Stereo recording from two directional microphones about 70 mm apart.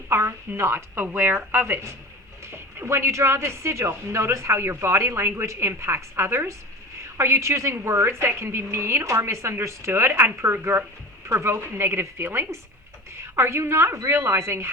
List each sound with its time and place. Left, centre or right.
0.1 s speech: right